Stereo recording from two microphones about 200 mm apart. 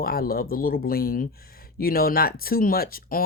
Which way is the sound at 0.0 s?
50° left (ahead or behind).